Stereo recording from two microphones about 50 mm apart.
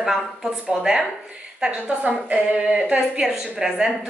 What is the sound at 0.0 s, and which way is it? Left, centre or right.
A woman's voice, centre.